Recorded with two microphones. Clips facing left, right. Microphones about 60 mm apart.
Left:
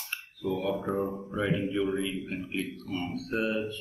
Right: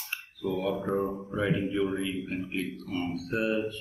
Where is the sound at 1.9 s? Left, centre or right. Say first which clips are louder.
Left 1 dB; right.